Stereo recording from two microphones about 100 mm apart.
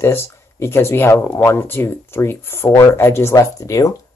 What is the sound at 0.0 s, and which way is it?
Speech, 25° left (ahead or behind).